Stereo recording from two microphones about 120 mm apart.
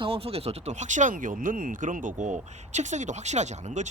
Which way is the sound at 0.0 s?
55° right (ahead or behind).